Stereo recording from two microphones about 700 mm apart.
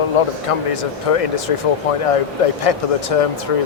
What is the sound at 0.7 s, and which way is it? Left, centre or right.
Speech, left.